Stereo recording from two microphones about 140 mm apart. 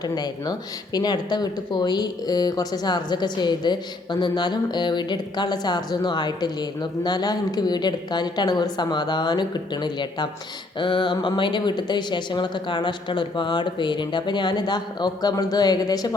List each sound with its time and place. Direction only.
0.0 s a woman's voice: 30° left (ahead or behind)